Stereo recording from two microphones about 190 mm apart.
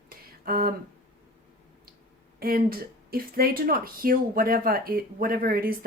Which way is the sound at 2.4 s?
50° right (ahead or behind).